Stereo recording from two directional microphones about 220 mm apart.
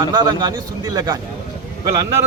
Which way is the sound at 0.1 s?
20° right (ahead or behind).